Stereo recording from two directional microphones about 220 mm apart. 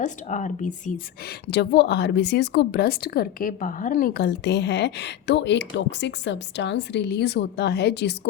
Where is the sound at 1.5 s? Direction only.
50° left (ahead or behind).